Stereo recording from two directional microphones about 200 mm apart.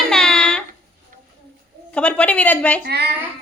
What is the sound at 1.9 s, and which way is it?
Speech, 5° left (ahead or behind).